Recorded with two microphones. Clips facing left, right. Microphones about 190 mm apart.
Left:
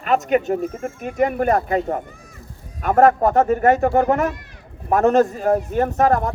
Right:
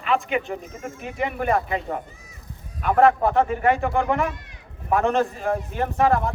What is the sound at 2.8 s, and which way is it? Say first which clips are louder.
A man's voice: left 3 dB; 45° left (ahead or behind).